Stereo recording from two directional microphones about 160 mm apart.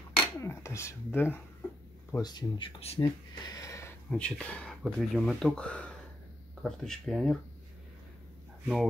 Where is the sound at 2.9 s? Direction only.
25° left (ahead or behind).